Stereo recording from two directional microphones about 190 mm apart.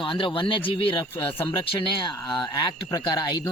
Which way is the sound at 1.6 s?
25° left (ahead or behind).